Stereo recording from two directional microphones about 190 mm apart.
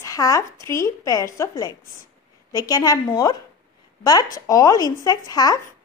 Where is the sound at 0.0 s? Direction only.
15° left (ahead or behind).